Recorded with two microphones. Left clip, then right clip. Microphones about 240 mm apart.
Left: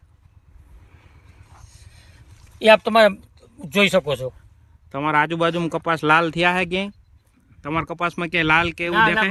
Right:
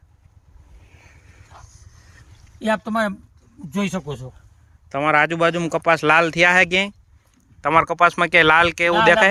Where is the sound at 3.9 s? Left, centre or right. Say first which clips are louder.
Left 10 dB; left.